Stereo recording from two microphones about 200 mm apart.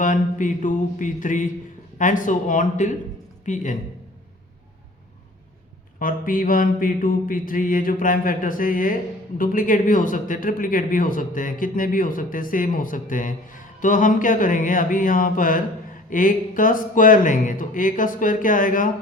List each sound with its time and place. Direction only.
0.0 s speech: 40° left (ahead or behind)
6.0 s a man's voice: 45° left (ahead or behind)